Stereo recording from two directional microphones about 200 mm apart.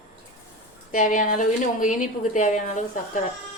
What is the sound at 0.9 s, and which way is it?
A woman's voice, 40° left (ahead or behind).